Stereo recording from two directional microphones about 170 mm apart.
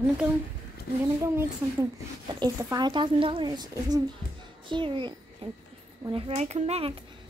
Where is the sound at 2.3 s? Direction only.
20° right (ahead or behind).